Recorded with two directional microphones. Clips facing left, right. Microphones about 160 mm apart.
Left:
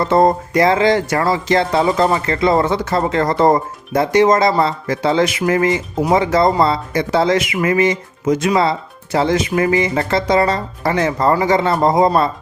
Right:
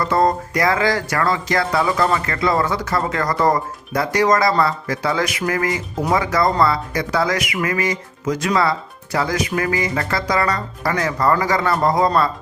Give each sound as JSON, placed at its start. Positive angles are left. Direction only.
{"t": 0.0, "sound": "speech", "side_deg": 25}